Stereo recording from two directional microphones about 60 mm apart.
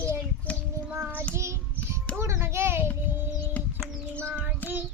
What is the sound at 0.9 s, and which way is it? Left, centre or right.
Child singing, right.